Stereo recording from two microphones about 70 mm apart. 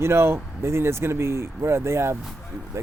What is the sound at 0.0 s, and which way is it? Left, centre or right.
Speech, right.